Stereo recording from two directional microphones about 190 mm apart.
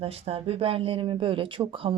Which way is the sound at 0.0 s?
30° right (ahead or behind).